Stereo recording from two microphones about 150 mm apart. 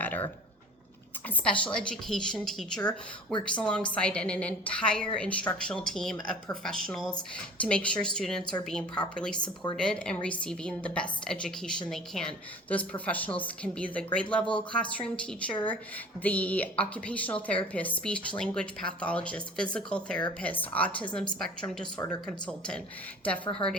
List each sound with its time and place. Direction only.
0.0 s a sound: 10° left (ahead or behind)
1.5 s a woman's voice: 5° left (ahead or behind)
23.6 s speech: 35° left (ahead or behind)